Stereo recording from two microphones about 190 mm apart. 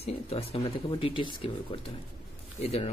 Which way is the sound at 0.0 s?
30° left (ahead or behind).